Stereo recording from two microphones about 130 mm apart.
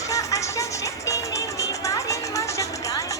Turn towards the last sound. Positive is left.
turn(degrees=25)  # may be behind; listen again after turning